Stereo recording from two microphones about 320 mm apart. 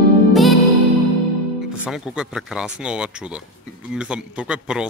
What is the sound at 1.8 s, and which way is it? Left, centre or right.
Speech, centre.